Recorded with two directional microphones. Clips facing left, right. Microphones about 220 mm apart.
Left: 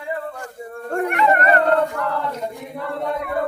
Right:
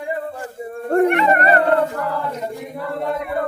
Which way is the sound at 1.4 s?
30° right (ahead or behind).